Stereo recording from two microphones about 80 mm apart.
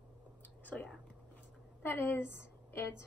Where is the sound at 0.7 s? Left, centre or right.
Centre.